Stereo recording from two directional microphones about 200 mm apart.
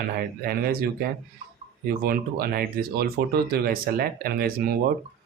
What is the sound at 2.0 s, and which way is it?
Speech, 50° right (ahead or behind).